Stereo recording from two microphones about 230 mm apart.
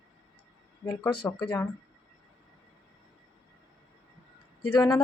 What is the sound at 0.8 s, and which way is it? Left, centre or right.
Speech, centre.